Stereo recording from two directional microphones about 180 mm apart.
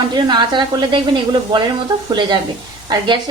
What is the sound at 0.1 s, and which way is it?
A woman's voice, 25° right (ahead or behind).